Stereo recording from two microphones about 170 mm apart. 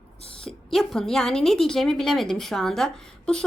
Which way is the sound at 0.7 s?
Centre (ahead or behind).